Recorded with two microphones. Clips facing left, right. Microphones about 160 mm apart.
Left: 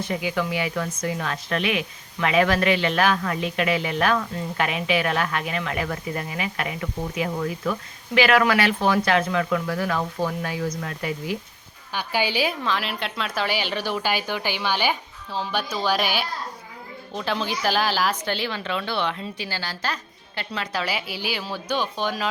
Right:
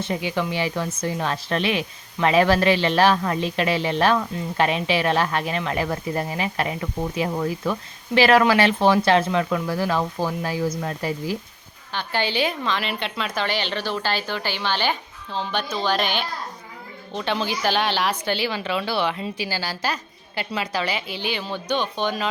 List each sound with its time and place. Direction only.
0.0 s speech: 25° right (ahead or behind)
8.1 s speech: 35° right (ahead or behind)
11.9 s a woman's voice: 10° left (ahead or behind); by 20.8 s 10° right (ahead or behind)
20.8 s speech: 5° left (ahead or behind)